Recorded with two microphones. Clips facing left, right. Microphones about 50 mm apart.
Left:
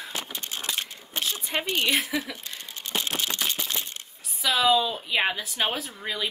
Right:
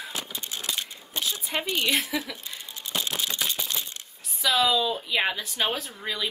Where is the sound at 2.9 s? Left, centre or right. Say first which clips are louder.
Left 1 dB; left.